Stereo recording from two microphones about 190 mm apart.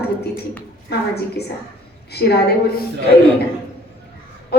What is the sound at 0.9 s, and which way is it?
A woman's voice, 60° left (ahead or behind).